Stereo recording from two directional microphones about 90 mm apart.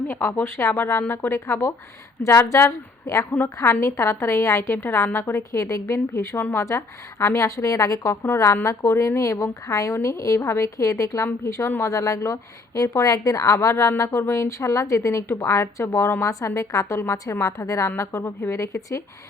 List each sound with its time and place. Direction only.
0.1 s a woman's voice: 25° left (ahead or behind)
5.4 s a woman's voice: 35° left (ahead or behind)